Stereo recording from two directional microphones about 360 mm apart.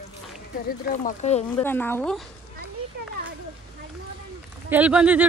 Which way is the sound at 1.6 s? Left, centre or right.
Centre.